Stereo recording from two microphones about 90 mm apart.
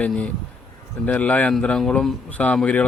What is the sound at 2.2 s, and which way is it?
Speech, 15° left (ahead or behind).